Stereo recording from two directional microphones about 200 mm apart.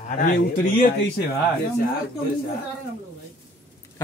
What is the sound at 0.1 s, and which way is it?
Speech, 45° left (ahead or behind).